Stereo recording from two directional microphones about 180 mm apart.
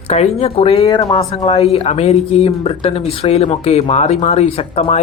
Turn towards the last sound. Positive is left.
turn(degrees=35)  # may be behind; listen again after turning